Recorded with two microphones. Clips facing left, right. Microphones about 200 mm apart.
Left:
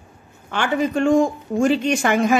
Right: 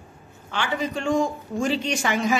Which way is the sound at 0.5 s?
50° left (ahead or behind).